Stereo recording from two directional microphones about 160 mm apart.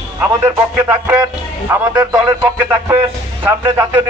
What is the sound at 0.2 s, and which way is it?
A man's voice, 10° right (ahead or behind).